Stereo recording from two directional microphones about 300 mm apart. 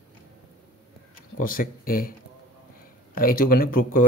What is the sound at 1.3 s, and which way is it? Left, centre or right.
Speech, left.